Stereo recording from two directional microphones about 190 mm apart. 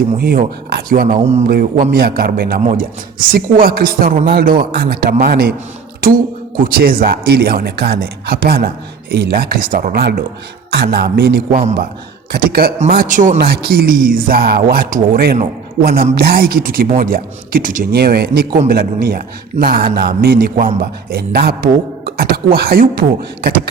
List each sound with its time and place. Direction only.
0.2 s a woman's voice: 55° right (ahead or behind); by 1.5 s 35° right (ahead or behind)
1.5 s a woman's voice: 50° right (ahead or behind)